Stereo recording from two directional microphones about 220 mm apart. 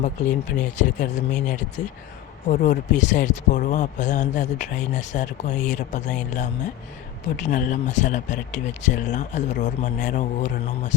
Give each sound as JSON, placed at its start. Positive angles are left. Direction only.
{"t": 0.0, "sound": "speech", "side_deg": 35}